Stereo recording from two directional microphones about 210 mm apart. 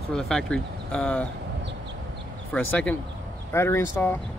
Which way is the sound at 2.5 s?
5° left (ahead or behind).